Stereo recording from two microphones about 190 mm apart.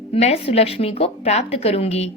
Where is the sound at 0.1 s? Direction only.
30° left (ahead or behind).